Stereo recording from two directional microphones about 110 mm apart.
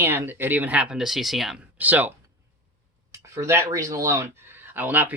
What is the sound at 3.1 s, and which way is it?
Speech, 25° right (ahead or behind).